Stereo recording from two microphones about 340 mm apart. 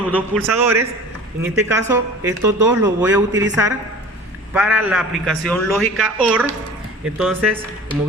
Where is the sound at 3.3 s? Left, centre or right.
Right.